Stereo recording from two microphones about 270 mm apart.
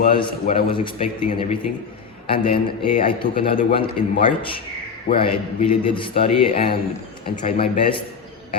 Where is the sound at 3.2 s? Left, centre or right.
Left.